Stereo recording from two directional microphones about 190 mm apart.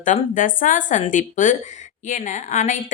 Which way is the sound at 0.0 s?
45° left (ahead or behind).